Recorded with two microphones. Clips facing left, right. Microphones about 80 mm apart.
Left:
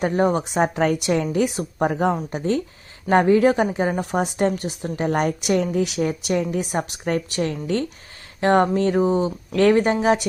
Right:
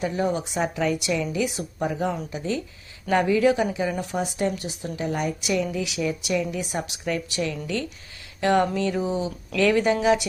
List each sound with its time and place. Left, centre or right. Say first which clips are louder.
0.0 s a woman's voice: left 5 dB; left